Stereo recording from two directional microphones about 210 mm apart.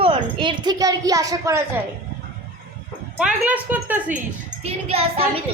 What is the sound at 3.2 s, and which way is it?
Speech, 5° right (ahead or behind).